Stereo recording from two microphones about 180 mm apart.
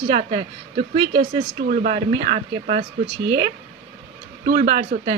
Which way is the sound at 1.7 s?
45° right (ahead or behind).